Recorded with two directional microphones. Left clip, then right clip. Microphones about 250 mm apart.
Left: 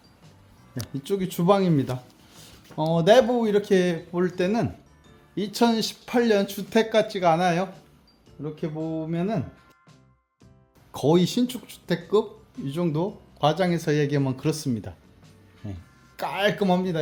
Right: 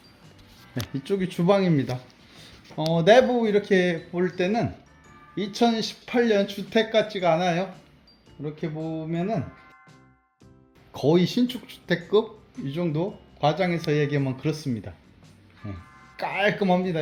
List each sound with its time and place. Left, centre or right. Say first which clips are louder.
0.8 s speech: right 1 dB; centre
10.9 s speech: even; centre